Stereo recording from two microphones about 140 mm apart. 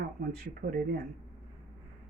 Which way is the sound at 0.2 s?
90° right.